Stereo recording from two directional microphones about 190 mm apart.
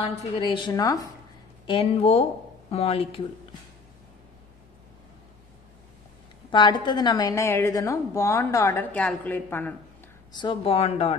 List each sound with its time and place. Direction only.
0.0 s a woman's voice: 30° left (ahead or behind)
1.7 s speech: 30° left (ahead or behind)
6.5 s a woman's voice: 25° left (ahead or behind)
10.3 s speech: 25° left (ahead or behind)